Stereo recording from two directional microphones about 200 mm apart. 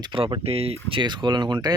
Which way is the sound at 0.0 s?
25° right (ahead or behind).